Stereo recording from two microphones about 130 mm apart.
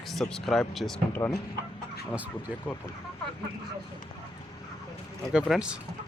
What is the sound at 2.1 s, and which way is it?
Speech, 10° right (ahead or behind).